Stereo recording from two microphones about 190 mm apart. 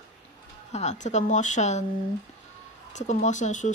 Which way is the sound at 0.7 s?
40° left (ahead or behind).